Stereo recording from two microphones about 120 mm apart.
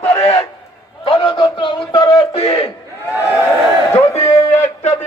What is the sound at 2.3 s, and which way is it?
Battle cry, 55° left (ahead or behind).